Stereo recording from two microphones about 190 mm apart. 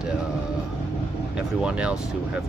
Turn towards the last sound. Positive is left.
turn(degrees=-5)  # may be behind; listen again after turning